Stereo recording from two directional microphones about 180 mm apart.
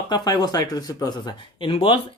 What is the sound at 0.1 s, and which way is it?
Speech, 20° left (ahead or behind).